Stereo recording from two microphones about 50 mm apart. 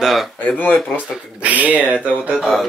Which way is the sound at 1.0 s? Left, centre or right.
Right.